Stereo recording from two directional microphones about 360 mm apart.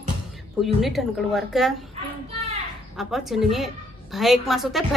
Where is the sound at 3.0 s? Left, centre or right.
Centre.